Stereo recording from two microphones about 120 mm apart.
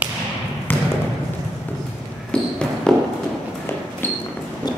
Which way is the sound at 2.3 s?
5° left (ahead or behind).